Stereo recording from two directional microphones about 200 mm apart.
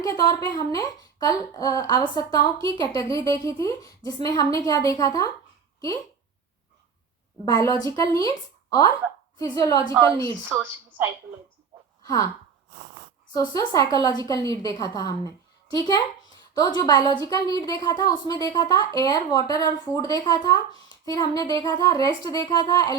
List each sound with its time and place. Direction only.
0.2 s a woman's voice: 20° left (ahead or behind)
7.4 s a woman's voice: 15° left (ahead or behind)
9.4 s a woman's voice: 15° left (ahead or behind)
10.5 s a woman's voice: 10° right (ahead or behind)
12.0 s speech: 15° left (ahead or behind)
13.3 s speech: 20° left (ahead or behind)